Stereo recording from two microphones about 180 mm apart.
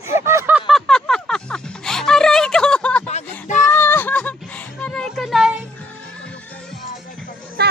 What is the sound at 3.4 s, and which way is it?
Child singing, 45° left (ahead or behind).